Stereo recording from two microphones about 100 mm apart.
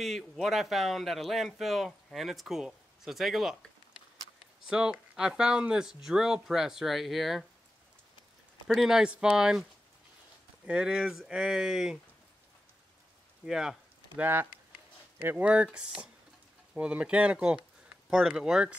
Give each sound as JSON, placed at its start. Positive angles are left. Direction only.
{"t": 0.0, "sound": "speech", "side_deg": 0}
{"t": 4.6, "sound": "speech", "side_deg": -10}
{"t": 8.6, "sound": "speech", "side_deg": -5}
{"t": 13.5, "sound": "a sound", "side_deg": -5}
{"t": 14.2, "sound": "speech", "side_deg": -20}